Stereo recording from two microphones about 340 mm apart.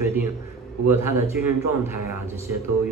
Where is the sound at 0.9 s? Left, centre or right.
Centre.